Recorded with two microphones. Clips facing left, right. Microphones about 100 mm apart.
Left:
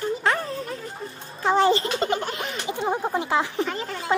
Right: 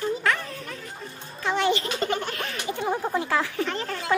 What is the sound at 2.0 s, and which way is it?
Speech, 20° left (ahead or behind).